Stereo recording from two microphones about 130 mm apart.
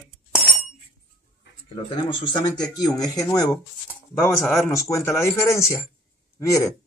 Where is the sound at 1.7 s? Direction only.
35° left (ahead or behind).